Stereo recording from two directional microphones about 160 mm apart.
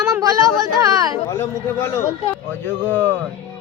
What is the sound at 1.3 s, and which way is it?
A man's voice, 15° left (ahead or behind).